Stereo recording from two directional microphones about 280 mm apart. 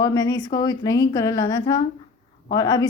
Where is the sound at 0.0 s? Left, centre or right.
Centre.